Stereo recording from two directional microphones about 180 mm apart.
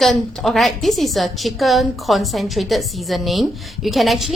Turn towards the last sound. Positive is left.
turn(degrees=0)  # may be behind; listen again after turning